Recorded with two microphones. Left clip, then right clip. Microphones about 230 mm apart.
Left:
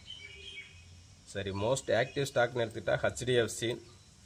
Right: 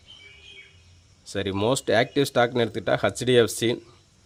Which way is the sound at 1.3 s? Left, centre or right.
Right.